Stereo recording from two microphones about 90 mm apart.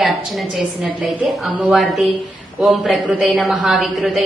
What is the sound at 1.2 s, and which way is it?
A woman's voice, centre (ahead or behind).